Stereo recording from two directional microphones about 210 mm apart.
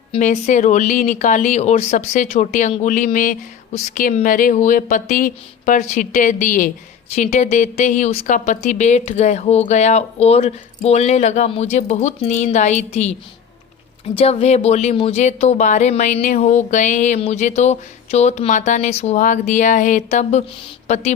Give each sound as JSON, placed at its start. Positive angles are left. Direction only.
{"t": 0.2, "sound": "a woman's voice", "side_deg": 35}